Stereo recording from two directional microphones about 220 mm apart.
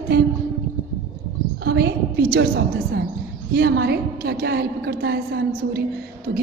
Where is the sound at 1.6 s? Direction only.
45° right (ahead or behind).